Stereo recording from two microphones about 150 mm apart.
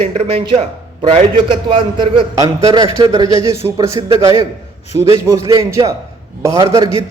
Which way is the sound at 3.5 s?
20° right (ahead or behind).